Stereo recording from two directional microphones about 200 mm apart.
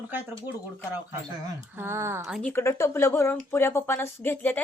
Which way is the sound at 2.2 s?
Centre (ahead or behind).